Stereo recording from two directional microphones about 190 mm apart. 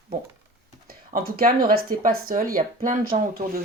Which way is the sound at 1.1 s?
50° right (ahead or behind).